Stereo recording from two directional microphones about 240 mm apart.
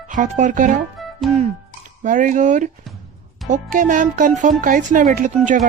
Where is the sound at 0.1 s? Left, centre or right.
Right.